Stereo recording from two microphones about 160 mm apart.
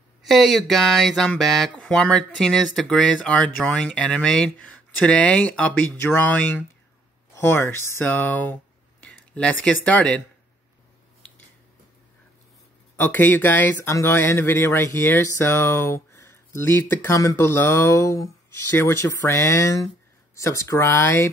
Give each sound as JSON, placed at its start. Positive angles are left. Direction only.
{"t": 0.2, "sound": "speech", "side_deg": 0}
{"t": 12.9, "sound": "speech", "side_deg": 10}